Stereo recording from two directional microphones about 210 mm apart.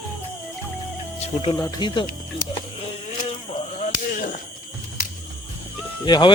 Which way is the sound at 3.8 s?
40° left (ahead or behind).